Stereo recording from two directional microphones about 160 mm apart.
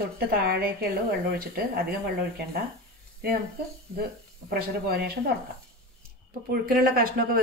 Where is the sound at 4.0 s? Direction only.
75° right (ahead or behind).